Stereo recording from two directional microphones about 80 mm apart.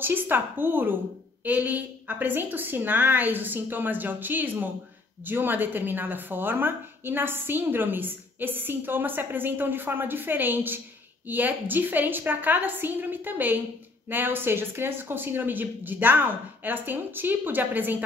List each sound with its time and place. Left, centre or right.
0.0 s a woman's voice: right